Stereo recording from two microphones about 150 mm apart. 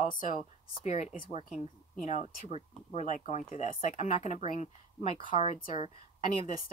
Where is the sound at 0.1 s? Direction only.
55° left (ahead or behind).